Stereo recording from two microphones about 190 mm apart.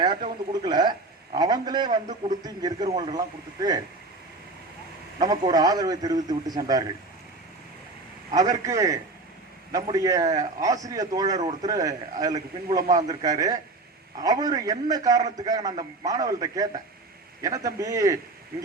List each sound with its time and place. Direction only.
0.6 s a man's voice: 20° right (ahead or behind)
2.0 s speech: 40° right (ahead or behind)
2.4 s a man's voice: 20° right (ahead or behind)
5.2 s a man's voice: 20° right (ahead or behind)
8.3 s a man's voice: 20° right (ahead or behind)